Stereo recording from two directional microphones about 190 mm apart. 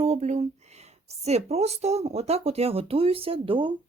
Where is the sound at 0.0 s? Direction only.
35° right (ahead or behind).